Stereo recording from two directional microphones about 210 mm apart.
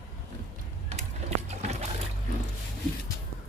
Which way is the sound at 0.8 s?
30° right (ahead or behind).